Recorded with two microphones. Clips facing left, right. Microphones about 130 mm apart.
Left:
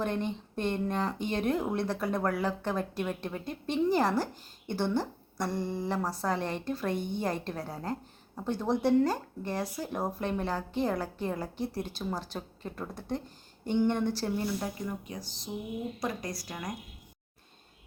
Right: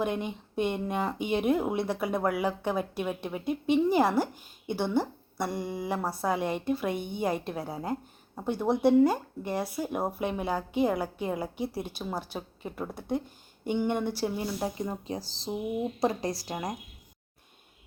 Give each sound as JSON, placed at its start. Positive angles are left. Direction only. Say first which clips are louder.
{"t": 0.0, "sound": "speech", "louder": "right 1 dB", "side_deg": -10}
{"t": 14.4, "sound": "speech", "louder": "right 2 dB", "side_deg": -25}